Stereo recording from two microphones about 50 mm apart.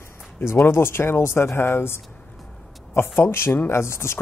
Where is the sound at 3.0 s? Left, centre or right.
Left.